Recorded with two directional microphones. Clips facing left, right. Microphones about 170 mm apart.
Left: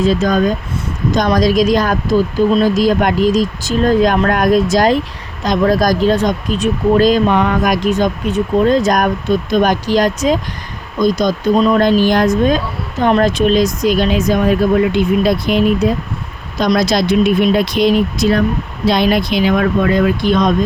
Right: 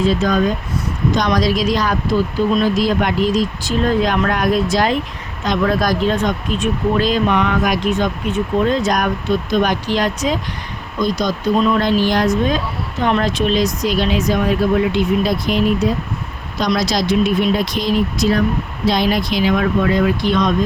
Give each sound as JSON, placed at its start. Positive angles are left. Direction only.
{"t": 0.0, "sound": "speech", "side_deg": 45}
{"t": 16.6, "sound": "speech", "side_deg": 50}